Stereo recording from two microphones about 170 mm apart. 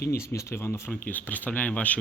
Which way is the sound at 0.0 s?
65° left (ahead or behind).